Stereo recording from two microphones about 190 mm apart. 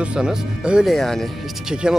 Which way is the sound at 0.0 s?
5° right (ahead or behind).